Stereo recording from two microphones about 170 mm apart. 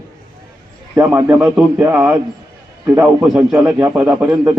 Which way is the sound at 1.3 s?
5° right (ahead or behind).